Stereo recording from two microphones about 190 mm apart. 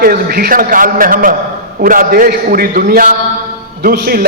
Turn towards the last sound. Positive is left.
turn(degrees=-50)  # may be behind; listen again after turning